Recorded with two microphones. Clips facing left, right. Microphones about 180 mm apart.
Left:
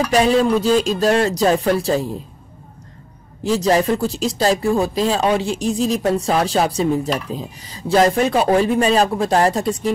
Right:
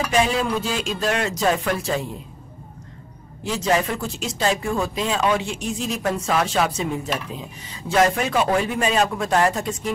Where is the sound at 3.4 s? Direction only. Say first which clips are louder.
Left 6 dB; 35° left (ahead or behind).